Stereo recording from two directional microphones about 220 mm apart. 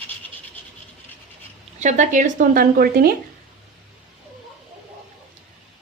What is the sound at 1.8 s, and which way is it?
Speech, 35° right (ahead or behind).